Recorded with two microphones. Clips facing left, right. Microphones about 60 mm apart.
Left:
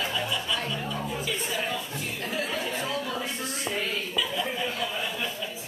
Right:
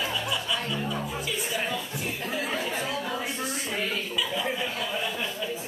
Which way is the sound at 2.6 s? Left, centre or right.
Centre.